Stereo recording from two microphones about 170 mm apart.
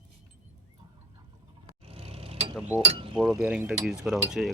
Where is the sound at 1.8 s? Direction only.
35° right (ahead or behind).